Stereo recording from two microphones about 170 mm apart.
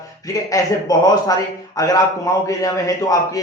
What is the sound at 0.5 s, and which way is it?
A man's voice, 20° left (ahead or behind).